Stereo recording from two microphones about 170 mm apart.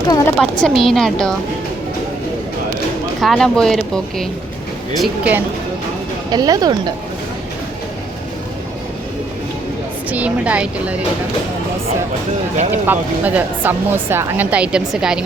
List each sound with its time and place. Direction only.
0.3 s speech: 5° left (ahead or behind)
3.2 s speech: centre (ahead or behind)
6.3 s speech: 20° right (ahead or behind)
10.1 s speech: 10° right (ahead or behind)
12.7 s speech: 10° right (ahead or behind)